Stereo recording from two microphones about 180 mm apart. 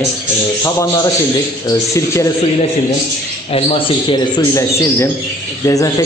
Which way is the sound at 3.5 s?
30° left (ahead or behind).